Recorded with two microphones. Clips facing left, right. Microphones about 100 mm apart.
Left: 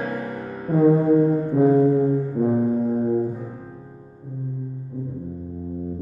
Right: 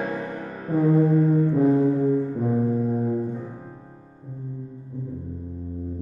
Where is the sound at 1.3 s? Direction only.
10° left (ahead or behind).